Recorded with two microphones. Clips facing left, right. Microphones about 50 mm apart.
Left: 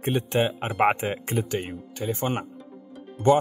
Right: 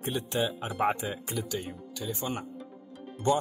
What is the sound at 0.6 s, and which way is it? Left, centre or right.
Speech, left.